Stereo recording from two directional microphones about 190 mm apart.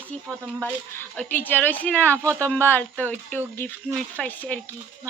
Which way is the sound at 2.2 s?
15° right (ahead or behind).